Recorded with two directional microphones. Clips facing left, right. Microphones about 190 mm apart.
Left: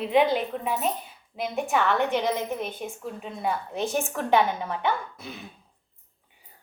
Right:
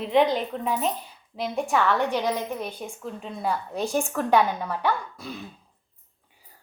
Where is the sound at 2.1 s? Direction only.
25° left (ahead or behind).